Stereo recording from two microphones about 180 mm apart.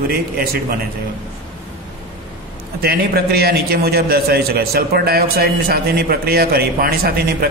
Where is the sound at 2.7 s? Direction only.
60° right (ahead or behind).